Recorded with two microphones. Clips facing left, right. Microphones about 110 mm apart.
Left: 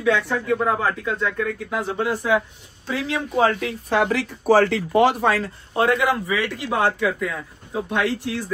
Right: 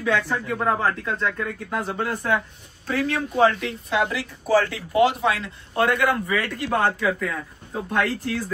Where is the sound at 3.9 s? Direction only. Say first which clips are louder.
Left 4 dB; 80° left.